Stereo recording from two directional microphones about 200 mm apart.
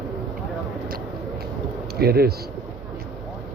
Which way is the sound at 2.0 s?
50° right (ahead or behind).